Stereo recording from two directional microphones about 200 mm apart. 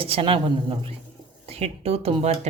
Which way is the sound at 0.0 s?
30° right (ahead or behind).